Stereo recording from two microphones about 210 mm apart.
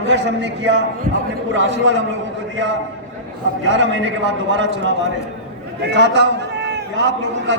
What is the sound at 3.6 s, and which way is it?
A man's voice, 60° right (ahead or behind).